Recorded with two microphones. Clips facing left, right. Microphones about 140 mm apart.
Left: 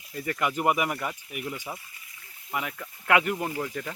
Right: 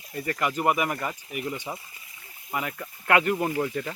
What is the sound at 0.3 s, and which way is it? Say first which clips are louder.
Speech: right 1 dB; 5° left (ahead or behind).